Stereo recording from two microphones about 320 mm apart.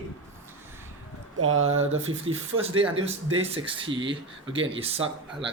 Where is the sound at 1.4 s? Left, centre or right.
Right.